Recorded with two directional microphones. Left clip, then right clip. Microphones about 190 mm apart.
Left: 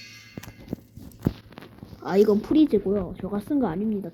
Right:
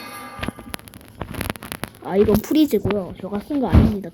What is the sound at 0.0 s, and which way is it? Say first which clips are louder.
Music: right 11 dB; 40° right (ahead or behind).